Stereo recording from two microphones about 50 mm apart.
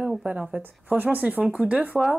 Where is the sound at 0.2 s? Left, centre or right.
Right.